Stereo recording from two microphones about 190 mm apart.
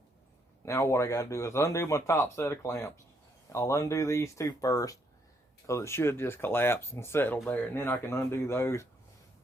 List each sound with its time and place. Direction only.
0.6 s speech: 15° left (ahead or behind)